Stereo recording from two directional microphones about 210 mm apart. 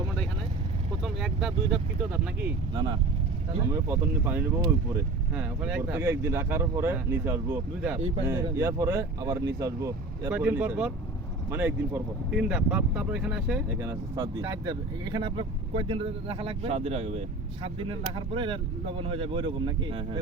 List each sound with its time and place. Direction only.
1.0 s speech: 5° right (ahead or behind)
2.7 s speech: 20° right (ahead or behind)